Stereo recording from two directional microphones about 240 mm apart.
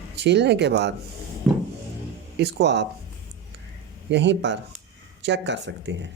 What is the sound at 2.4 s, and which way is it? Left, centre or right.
Speech, right.